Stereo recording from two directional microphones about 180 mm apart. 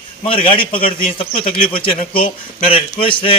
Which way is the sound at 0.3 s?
30° left (ahead or behind).